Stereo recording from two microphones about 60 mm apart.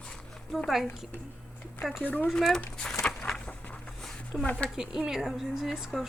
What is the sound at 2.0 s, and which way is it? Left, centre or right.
Speech, left.